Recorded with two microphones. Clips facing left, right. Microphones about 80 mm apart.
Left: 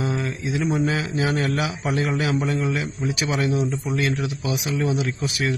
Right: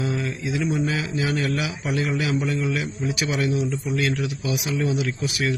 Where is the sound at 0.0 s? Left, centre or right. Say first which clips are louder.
Left 1 dB; left.